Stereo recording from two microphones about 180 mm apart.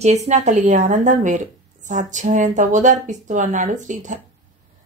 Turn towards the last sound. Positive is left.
turn(degrees=-45)  # may be behind; listen again after turning